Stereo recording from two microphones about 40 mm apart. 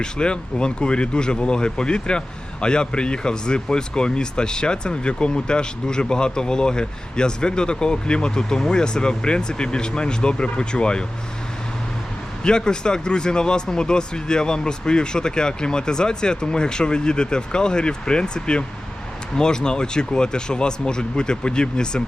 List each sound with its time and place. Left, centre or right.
0.0 s speech: left
12.4 s speech: left